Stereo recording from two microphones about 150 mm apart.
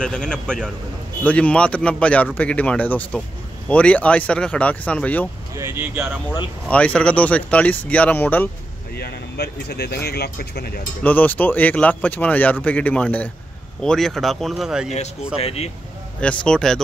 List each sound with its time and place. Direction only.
0.0 s speech: 5° left (ahead or behind)
5.6 s speech: 15° right (ahead or behind)
6.7 s speech: 10° left (ahead or behind)
8.9 s speech: 90° left
11.0 s speech: 10° left (ahead or behind)
15.4 s speech: 45° left (ahead or behind)
16.2 s speech: 5° left (ahead or behind)